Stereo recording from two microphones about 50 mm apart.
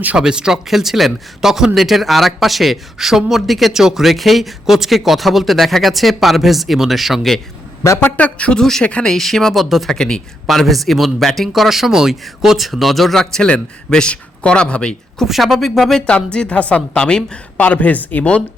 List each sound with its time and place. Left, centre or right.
0.2 s a man's voice: centre
8.1 s speech: left
8.8 s speech: left
9.0 s a man's voice: centre
9.9 s speech: centre
10.4 s a man's voice: centre
13.5 s speech: left
15.3 s a man's voice: centre
16.0 s speech: centre
17.6 s speech: left